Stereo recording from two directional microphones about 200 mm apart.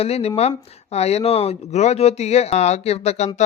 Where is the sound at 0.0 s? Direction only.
30° left (ahead or behind).